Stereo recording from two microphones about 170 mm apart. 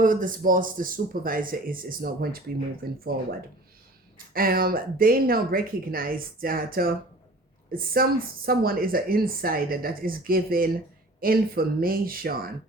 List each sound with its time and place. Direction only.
0.0 s a woman's voice: 55° right (ahead or behind)
4.4 s a woman's voice: 60° right (ahead or behind)